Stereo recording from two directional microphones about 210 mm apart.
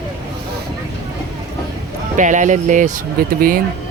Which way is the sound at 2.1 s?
35° right (ahead or behind).